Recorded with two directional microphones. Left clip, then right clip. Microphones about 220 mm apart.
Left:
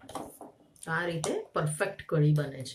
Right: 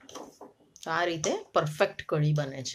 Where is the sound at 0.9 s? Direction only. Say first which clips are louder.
Right 3 dB; 45° right (ahead or behind).